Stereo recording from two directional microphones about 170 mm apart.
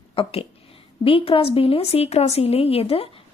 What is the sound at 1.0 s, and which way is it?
Speech, 30° left (ahead or behind).